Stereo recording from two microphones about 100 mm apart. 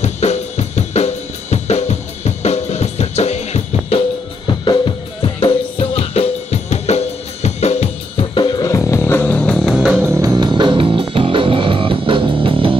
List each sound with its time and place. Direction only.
0.2 s drum kit: 90° left
4.6 s drum: 60° left (ahead or behind); by 8.3 s 90° left
8.4 s music: 50° left (ahead or behind)
8.6 s music: 30° left (ahead or behind); by 9.6 s 10° left (ahead or behind)
9.6 s music: centre (ahead or behind)
9.9 s music: 30° right (ahead or behind); by 12.7 s 60° right (ahead or behind)